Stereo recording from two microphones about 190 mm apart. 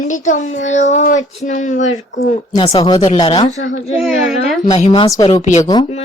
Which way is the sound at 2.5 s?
25° left (ahead or behind).